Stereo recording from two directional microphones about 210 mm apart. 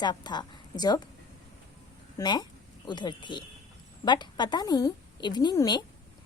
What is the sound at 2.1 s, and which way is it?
A woman's voice, 20° left (ahead or behind).